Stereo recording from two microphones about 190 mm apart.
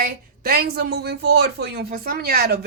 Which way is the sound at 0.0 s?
50° right (ahead or behind).